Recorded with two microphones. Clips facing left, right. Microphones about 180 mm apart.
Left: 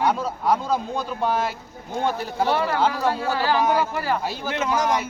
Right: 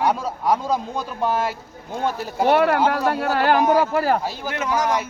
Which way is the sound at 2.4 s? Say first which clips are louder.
Right 6 dB; 60° right (ahead or behind).